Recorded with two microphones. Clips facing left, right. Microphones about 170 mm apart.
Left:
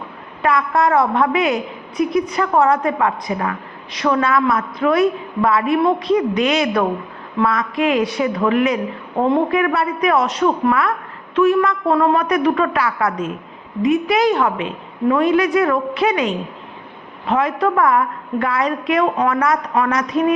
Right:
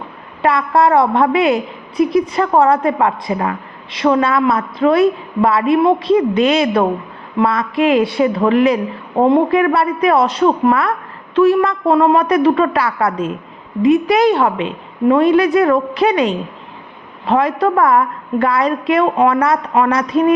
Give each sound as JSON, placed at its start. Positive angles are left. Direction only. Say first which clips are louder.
{"t": 0.4, "sound": "a woman's voice", "louder": "right 3 dB", "side_deg": -30}